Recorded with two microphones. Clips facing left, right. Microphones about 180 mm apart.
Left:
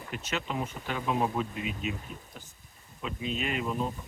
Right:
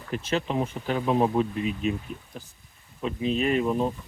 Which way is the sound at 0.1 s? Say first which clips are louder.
Right 7 dB; 30° right (ahead or behind).